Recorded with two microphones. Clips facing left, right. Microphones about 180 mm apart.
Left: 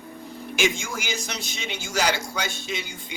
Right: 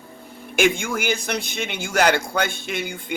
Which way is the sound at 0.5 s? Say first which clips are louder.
Right 6 dB; 55° right (ahead or behind).